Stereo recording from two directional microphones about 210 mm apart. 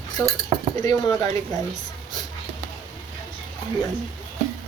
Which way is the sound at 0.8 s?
15° left (ahead or behind).